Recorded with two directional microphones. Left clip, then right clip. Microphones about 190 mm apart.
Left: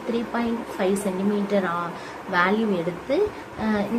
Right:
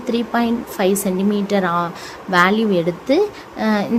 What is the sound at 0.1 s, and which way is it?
Speech, 60° right (ahead or behind).